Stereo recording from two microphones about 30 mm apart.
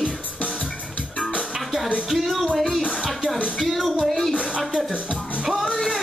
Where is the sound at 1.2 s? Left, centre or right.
Left.